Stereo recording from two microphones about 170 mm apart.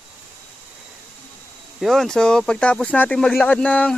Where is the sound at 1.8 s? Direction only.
Centre (ahead or behind).